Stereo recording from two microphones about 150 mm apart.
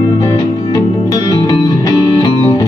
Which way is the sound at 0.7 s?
25° left (ahead or behind).